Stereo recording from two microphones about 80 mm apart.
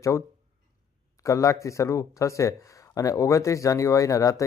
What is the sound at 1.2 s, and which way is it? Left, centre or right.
A man's voice, left.